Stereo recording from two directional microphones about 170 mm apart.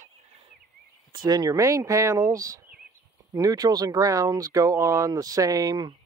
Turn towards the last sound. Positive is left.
turn(degrees=-25)  # may be behind; listen again after turning